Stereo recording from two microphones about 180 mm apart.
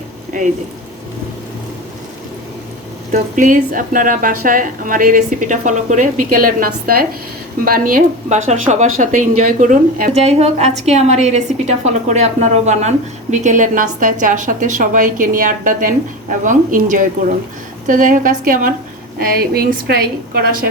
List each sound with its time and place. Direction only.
3.1 s a woman's voice: 45° right (ahead or behind)